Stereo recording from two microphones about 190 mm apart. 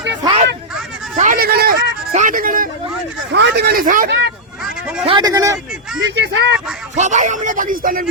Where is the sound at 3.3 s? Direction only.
60° right (ahead or behind); by 4.1 s 45° right (ahead or behind).